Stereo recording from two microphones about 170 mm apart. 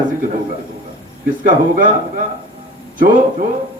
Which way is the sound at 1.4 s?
50° right (ahead or behind).